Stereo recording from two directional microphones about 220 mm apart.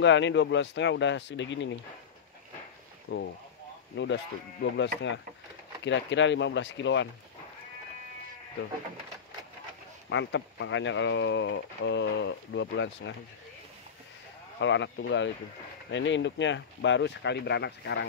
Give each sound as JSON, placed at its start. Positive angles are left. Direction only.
{"t": 0.0, "sound": "speech", "side_deg": 55}
{"t": 3.1, "sound": "speech", "side_deg": 50}
{"t": 10.0, "sound": "speech", "side_deg": 55}
{"t": 14.6, "sound": "speech", "side_deg": 55}